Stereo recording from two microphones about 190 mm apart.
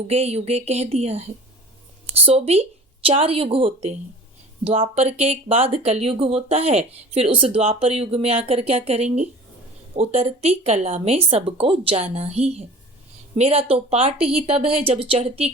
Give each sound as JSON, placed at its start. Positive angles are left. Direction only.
{"t": 0.1, "sound": "speech", "side_deg": -35}